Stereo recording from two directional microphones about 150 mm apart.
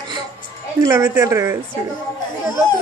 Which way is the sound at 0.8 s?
20° right (ahead or behind).